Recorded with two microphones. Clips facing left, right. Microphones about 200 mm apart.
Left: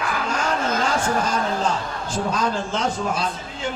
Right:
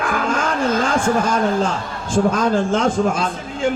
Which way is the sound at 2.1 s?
50° right (ahead or behind).